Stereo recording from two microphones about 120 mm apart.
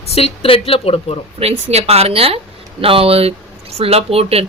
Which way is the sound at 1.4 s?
60° right (ahead or behind).